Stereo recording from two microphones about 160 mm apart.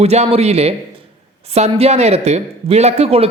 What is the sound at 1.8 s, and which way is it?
Speech, 40° right (ahead or behind).